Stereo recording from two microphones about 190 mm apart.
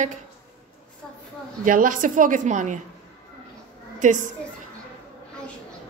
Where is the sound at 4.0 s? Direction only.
40° right (ahead or behind).